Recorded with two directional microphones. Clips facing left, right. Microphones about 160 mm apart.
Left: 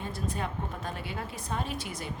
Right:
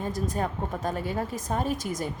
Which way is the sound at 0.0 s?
40° right (ahead or behind).